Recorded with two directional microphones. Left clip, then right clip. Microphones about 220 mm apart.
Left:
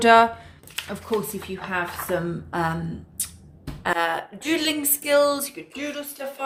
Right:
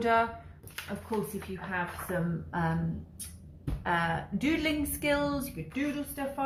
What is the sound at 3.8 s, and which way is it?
A woman's voice, 50° left (ahead or behind).